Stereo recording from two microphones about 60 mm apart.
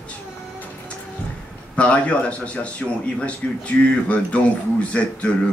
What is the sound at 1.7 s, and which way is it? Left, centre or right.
Speech, left.